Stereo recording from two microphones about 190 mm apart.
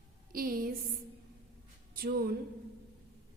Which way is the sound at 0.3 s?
50° right (ahead or behind).